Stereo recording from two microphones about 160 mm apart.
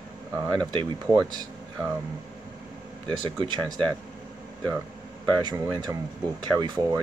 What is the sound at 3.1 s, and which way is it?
Speech, 30° right (ahead or behind).